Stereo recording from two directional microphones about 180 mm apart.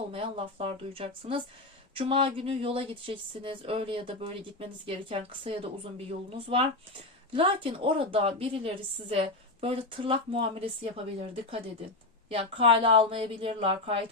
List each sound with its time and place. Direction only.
0.1 s speech: 30° right (ahead or behind)